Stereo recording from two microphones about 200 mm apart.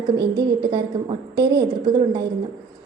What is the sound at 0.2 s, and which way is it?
Speech, 55° right (ahead or behind).